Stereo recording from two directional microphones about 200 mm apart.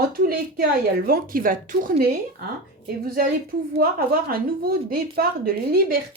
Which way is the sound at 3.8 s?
50° right (ahead or behind).